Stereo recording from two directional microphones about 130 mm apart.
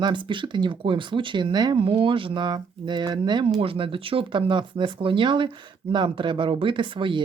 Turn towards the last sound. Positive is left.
turn(degrees=-40)  # may be behind; listen again after turning